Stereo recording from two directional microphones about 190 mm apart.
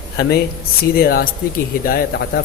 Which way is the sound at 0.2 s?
60° left (ahead or behind).